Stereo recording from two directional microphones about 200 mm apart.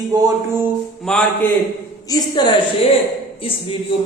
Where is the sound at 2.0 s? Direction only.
20° left (ahead or behind).